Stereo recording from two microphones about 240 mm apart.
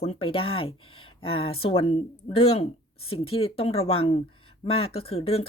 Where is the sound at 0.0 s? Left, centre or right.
Left.